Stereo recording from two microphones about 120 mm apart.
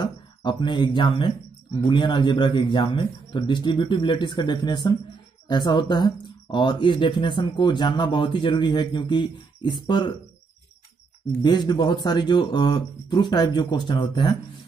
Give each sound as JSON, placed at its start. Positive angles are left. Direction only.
{"t": 0.0, "sound": "speech", "side_deg": 40}
{"t": 11.4, "sound": "speech", "side_deg": 35}